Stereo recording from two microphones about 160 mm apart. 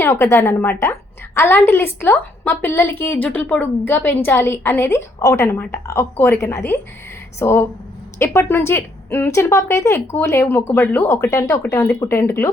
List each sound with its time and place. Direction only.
0.0 s a woman's voice: 15° left (ahead or behind)